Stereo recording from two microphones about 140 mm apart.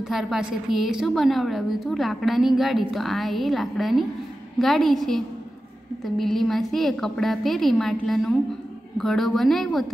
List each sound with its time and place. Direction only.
0.0 s a woman's voice: 5° right (ahead or behind)